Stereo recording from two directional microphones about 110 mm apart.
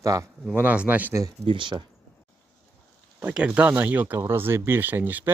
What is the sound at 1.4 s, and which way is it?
Speech, 45° right (ahead or behind).